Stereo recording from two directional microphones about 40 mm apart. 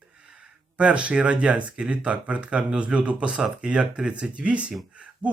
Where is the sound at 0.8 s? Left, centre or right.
Right.